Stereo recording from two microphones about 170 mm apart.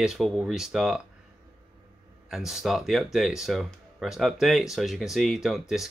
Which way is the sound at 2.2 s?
Centre (ahead or behind).